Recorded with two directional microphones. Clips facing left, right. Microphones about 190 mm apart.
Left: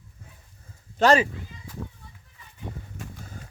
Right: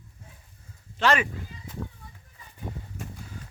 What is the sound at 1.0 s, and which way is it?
Speech, 40° left (ahead or behind).